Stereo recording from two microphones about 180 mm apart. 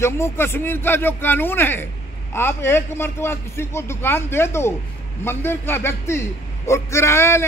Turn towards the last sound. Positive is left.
turn(degrees=15)  # may be behind; listen again after turning